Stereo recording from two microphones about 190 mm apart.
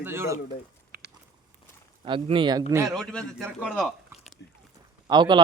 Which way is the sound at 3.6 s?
Centre (ahead or behind).